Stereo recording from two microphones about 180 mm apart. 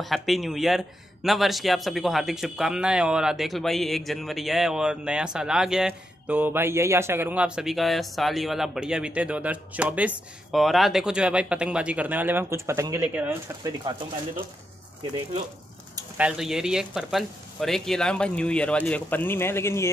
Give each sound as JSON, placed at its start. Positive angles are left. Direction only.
{"t": 0.0, "sound": "speech", "side_deg": 0}
{"t": 16.2, "sound": "speech", "side_deg": -5}